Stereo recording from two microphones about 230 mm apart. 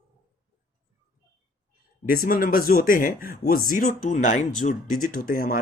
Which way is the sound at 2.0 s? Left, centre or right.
Left.